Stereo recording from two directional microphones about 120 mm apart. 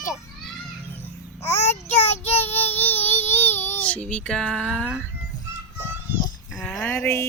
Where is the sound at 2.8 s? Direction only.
15° left (ahead or behind).